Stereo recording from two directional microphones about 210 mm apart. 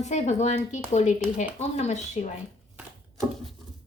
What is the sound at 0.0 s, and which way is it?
Speech, 35° left (ahead or behind).